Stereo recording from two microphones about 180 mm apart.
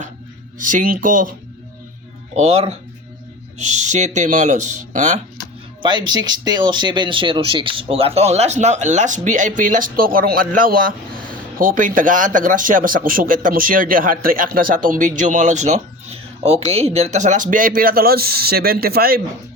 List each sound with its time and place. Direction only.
0.6 s speech: 50° right (ahead or behind)
2.3 s speech: 35° right (ahead or behind)
5.8 s speech: 25° right (ahead or behind); by 19.2 s 55° right (ahead or behind)